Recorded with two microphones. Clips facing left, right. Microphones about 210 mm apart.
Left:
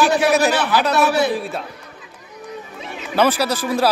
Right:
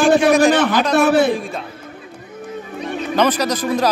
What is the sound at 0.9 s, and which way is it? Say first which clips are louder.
Speech: right 5 dB; 50° right (ahead or behind).